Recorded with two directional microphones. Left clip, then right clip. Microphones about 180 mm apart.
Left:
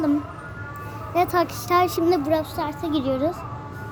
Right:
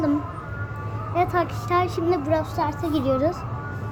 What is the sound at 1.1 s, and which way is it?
Speech, 60° left (ahead or behind).